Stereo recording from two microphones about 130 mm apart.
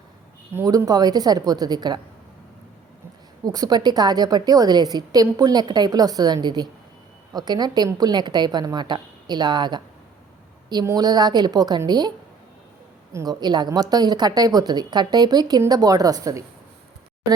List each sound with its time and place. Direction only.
0.5 s a woman's voice: 30° right (ahead or behind)
3.4 s a woman's voice: 30° right (ahead or behind)
10.8 s a woman's voice: 30° right (ahead or behind)
13.1 s a woman's voice: 30° right (ahead or behind)